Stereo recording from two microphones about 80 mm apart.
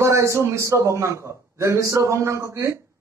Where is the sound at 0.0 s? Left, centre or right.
Right.